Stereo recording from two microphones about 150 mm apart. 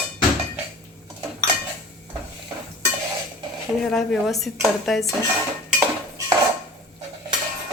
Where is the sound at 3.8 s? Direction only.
5° left (ahead or behind).